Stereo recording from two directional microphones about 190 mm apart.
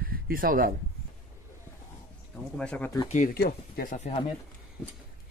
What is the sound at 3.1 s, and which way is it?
Speech, 40° left (ahead or behind).